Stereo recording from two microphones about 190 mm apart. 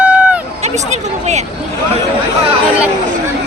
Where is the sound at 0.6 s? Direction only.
35° right (ahead or behind).